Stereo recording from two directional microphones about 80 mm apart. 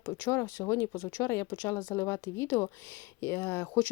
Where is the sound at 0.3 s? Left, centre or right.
Left.